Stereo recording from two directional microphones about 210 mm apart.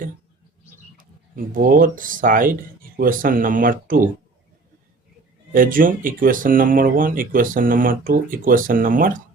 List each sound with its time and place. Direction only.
0.9 s speech: 40° right (ahead or behind)
5.5 s speech: 40° right (ahead or behind)